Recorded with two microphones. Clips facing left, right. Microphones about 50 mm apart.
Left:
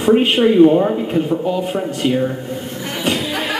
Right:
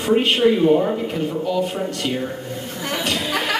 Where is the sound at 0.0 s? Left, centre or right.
Centre.